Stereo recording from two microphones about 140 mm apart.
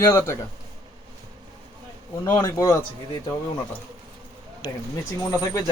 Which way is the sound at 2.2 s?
20° left (ahead or behind).